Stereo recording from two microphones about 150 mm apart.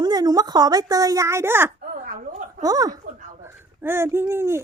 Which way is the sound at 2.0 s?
60° right (ahead or behind).